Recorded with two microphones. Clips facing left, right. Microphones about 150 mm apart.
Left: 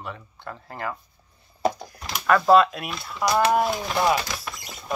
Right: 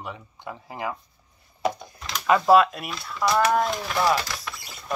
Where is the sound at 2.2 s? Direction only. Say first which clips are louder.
Even; 10° right (ahead or behind); by 4.2 s 15° left (ahead or behind).